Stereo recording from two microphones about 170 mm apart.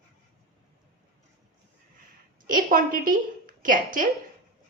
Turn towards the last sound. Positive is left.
turn(degrees=-50)  # may be behind; listen again after turning